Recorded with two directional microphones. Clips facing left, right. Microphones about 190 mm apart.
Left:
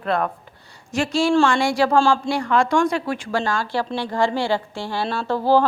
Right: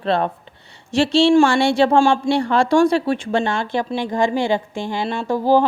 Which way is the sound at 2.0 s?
10° right (ahead or behind).